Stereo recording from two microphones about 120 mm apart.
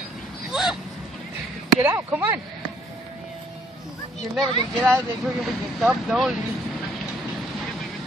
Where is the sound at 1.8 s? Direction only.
15° right (ahead or behind).